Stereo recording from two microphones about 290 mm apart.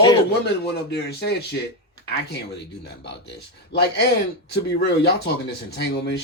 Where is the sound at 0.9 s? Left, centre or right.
Left.